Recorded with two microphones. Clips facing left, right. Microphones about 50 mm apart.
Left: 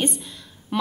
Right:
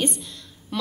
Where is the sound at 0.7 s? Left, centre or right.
Centre.